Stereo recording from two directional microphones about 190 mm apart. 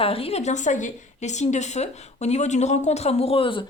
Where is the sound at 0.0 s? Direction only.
30° left (ahead or behind).